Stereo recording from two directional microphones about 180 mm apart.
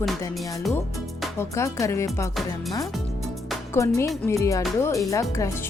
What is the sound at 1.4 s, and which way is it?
Speech, 15° left (ahead or behind).